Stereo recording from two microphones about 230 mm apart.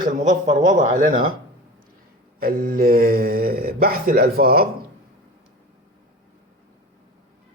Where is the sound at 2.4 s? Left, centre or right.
Right.